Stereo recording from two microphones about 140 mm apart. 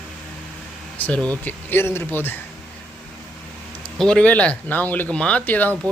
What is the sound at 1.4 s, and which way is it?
Speech, 15° left (ahead or behind).